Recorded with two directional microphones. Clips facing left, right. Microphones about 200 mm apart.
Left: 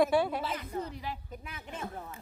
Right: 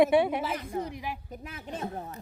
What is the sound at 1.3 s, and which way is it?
Speech, 40° right (ahead or behind).